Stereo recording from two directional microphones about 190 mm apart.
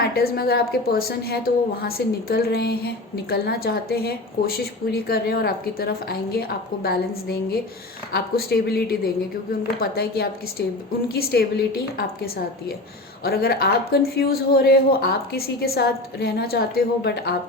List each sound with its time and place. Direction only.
0.0 s a woman's voice: 55° left (ahead or behind)